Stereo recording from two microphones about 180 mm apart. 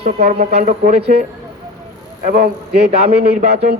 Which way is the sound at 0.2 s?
60° right (ahead or behind).